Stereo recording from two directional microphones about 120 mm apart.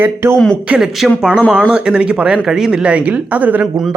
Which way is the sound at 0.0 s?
20° right (ahead or behind).